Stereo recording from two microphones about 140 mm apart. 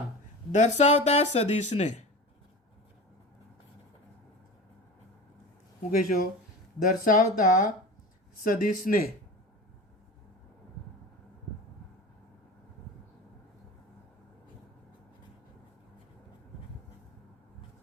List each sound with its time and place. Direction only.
0.5 s speech: 55° left (ahead or behind)
6.0 s speech: 80° left